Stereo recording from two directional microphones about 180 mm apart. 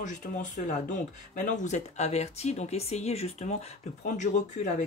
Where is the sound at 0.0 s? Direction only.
45° left (ahead or behind).